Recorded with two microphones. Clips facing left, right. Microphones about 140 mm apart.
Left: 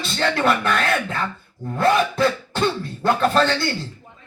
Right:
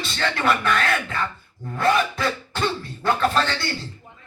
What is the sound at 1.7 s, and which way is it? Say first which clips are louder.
Speech: left 3 dB; 30° left (ahead or behind).